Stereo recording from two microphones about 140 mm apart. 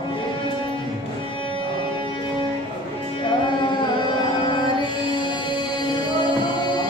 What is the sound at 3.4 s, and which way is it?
Carnatic music, 35° left (ahead or behind).